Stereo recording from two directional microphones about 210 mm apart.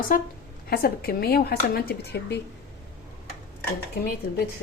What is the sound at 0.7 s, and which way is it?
Speech, 45° left (ahead or behind).